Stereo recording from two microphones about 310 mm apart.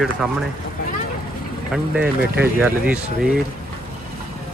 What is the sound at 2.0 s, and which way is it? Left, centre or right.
Speech, right.